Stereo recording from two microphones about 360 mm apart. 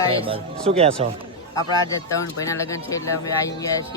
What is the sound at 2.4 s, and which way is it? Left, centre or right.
Speech, centre.